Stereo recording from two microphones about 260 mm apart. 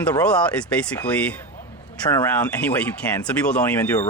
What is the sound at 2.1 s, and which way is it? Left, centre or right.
Speech, centre.